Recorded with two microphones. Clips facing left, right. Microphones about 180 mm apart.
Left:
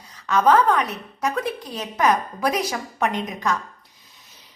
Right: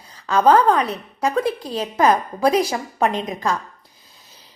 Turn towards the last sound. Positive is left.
turn(degrees=-30)  # may be behind; listen again after turning